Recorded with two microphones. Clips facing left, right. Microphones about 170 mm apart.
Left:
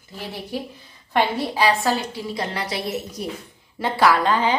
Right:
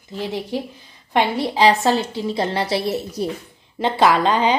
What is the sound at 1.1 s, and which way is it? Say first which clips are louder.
A woman's voice: right 2 dB; 15° right (ahead or behind).